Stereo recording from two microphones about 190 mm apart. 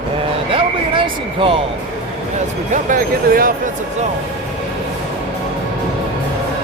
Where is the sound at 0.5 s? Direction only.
30° right (ahead or behind).